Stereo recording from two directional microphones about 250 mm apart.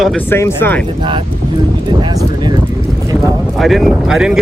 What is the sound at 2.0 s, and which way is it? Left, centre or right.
Speech, centre.